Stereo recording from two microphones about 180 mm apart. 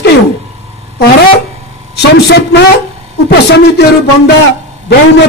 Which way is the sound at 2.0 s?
65° left (ahead or behind).